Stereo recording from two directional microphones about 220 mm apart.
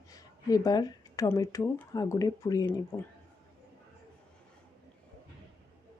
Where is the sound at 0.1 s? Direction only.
15° left (ahead or behind).